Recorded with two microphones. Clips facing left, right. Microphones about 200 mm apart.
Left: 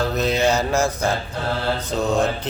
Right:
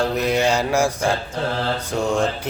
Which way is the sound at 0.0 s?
10° right (ahead or behind).